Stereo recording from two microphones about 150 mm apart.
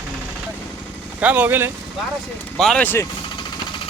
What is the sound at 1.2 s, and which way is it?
Speech, 10° right (ahead or behind).